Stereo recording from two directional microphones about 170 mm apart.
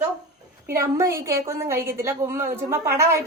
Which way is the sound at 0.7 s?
15° right (ahead or behind).